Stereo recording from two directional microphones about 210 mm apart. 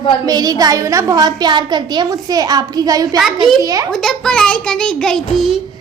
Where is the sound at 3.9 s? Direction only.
Centre (ahead or behind).